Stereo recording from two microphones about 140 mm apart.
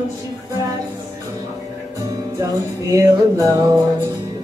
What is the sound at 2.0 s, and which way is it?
Music, 25° right (ahead or behind).